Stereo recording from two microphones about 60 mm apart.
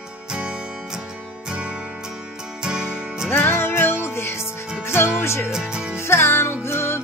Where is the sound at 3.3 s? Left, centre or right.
Left.